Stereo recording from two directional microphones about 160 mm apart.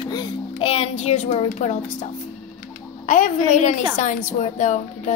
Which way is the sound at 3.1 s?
55° left (ahead or behind).